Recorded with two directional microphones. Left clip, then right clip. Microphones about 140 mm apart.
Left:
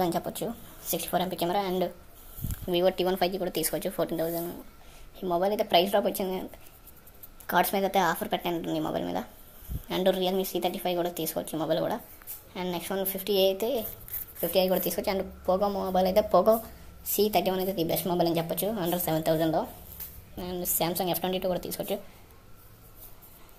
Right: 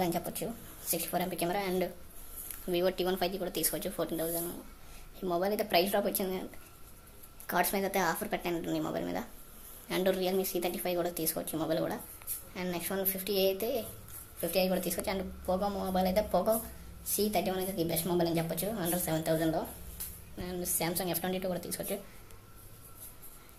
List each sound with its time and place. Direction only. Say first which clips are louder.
0.0 s a woman's voice: left 5 dB; 20° left (ahead or behind)
7.4 s speech: left 6 dB; 20° left (ahead or behind)